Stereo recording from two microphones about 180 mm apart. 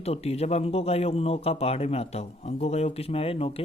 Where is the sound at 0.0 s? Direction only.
35° left (ahead or behind).